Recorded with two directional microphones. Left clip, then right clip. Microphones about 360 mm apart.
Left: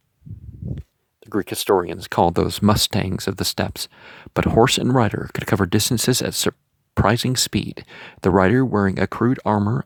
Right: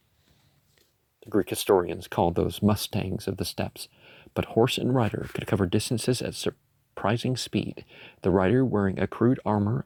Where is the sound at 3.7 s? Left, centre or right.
Left.